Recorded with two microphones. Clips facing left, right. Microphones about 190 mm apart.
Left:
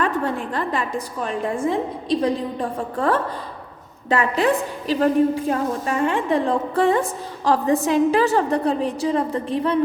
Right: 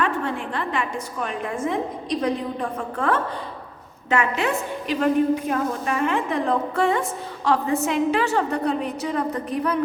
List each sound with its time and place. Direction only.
0.0 s a woman's voice: 40° left (ahead or behind)